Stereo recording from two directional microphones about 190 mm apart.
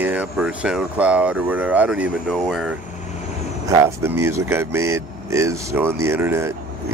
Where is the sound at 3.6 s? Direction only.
15° right (ahead or behind).